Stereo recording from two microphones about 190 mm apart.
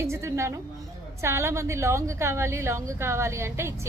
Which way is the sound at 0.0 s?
15° right (ahead or behind).